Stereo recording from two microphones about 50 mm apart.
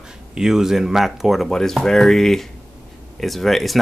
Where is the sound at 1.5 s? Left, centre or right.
Centre.